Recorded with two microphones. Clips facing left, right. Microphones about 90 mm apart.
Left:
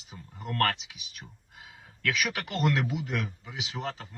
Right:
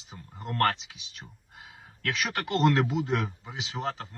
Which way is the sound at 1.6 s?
25° right (ahead or behind).